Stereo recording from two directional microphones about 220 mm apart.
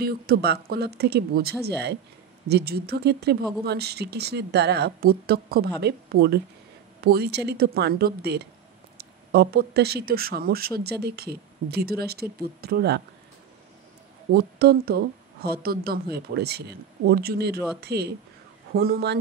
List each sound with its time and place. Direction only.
0.0 s speech: 45° right (ahead or behind)
14.3 s speech: 45° right (ahead or behind)